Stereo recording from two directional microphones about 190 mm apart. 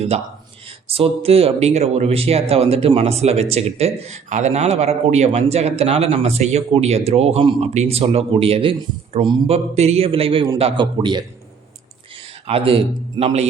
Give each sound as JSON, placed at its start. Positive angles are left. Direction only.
{"t": 0.9, "sound": "a man's voice", "side_deg": -30}